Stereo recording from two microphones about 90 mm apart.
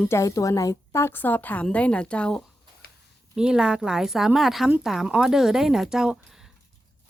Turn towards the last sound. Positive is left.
turn(degrees=-5)  # may be behind; listen again after turning